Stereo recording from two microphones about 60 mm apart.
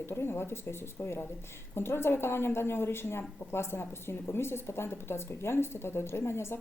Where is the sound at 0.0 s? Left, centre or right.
Left.